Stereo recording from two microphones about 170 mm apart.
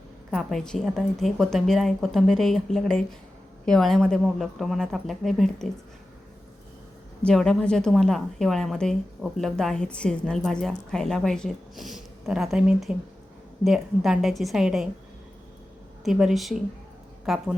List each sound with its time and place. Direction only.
0.3 s a woman's voice: centre (ahead or behind)
7.3 s a woman's voice: 5° left (ahead or behind)
16.0 s a woman's voice: centre (ahead or behind)